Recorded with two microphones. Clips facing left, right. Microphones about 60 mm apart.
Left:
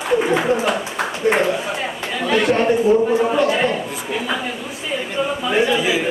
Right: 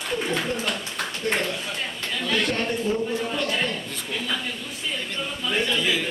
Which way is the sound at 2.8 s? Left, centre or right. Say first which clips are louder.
Left 10 dB; left.